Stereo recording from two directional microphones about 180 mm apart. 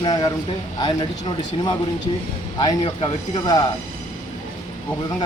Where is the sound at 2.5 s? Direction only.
25° left (ahead or behind).